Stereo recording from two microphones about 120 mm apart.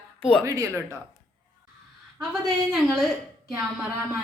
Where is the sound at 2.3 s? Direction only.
Centre (ahead or behind).